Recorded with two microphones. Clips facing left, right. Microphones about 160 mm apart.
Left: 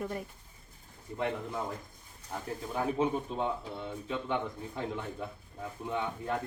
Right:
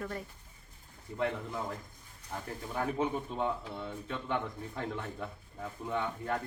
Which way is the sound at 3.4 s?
10° left (ahead or behind).